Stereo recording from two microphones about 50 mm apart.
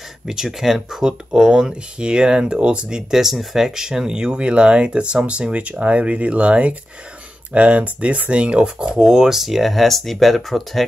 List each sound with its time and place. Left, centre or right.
0.3 s speech: centre